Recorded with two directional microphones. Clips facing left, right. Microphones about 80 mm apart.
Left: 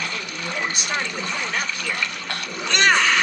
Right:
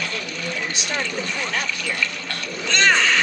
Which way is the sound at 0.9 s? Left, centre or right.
Centre.